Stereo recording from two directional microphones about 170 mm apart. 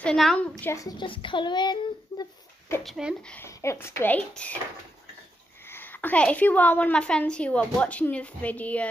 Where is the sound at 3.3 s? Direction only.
15° left (ahead or behind).